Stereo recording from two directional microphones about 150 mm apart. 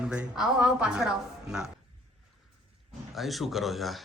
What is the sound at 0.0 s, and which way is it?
Speech, 5° right (ahead or behind).